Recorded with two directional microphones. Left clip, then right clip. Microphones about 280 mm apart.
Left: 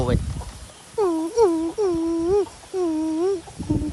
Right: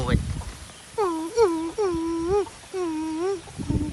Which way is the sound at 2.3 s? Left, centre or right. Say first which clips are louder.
Left 3 dB; centre.